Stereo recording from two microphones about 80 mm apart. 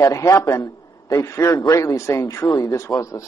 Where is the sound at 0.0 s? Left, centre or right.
Left.